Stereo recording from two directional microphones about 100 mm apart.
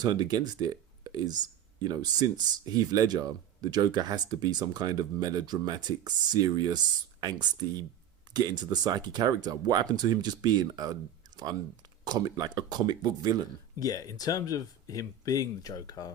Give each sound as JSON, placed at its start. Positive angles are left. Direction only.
{"t": 0.0, "sound": "speech", "side_deg": -45}
{"t": 12.0, "sound": "speech", "side_deg": -45}
{"t": 13.7, "sound": "speech", "side_deg": 35}